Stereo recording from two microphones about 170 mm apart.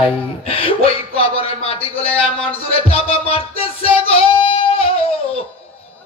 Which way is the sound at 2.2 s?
35° left (ahead or behind).